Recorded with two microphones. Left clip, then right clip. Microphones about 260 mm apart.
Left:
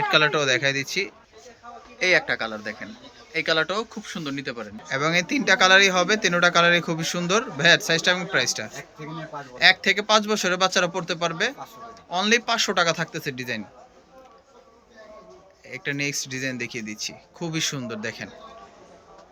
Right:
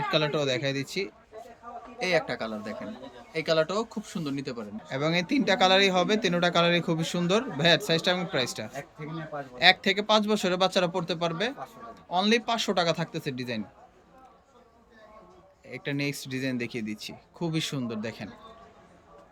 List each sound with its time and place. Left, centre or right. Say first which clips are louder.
0.1 s speech: left 7 dB; centre
15.6 s speech: left 4 dB; centre